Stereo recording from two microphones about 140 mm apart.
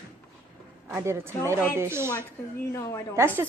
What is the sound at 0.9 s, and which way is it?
A woman's voice, 20° right (ahead or behind).